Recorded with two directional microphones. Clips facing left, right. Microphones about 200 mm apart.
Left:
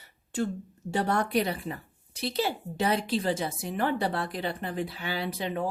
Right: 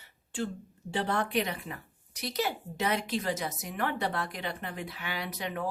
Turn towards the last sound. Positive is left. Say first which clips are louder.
# left 5 dB
turn(degrees=30)  # may be behind; listen again after turning